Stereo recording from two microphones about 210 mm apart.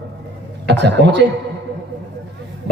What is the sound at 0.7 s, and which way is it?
Speech, 55° right (ahead or behind).